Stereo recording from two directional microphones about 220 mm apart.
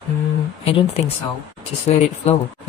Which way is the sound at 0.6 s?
25° left (ahead or behind).